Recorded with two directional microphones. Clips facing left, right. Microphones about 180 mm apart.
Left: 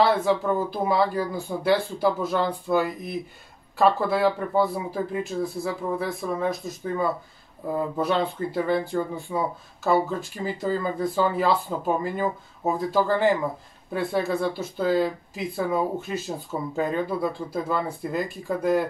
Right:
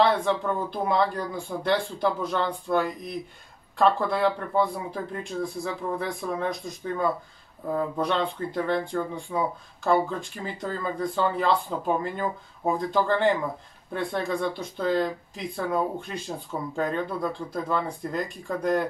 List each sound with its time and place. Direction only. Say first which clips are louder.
0.0 s speech: left 2 dB; 5° left (ahead or behind)